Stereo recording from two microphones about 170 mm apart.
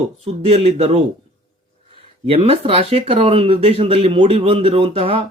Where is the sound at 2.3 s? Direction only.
35° right (ahead or behind).